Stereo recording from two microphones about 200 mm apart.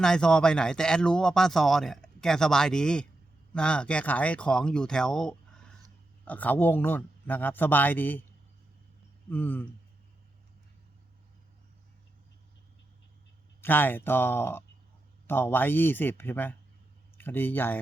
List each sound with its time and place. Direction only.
0.0 s speech: 5° left (ahead or behind)
9.3 s speech: 10° left (ahead or behind)
13.6 s speech: 10° left (ahead or behind)